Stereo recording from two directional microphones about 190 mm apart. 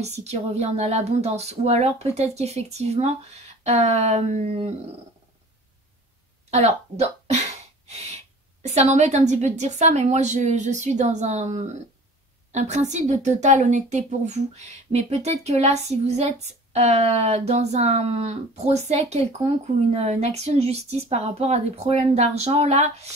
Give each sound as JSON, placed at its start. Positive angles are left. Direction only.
{"t": 0.0, "sound": "a woman's voice", "side_deg": -35}
{"t": 6.5, "sound": "a sound", "side_deg": -35}
{"t": 8.6, "sound": "a woman's voice", "side_deg": -35}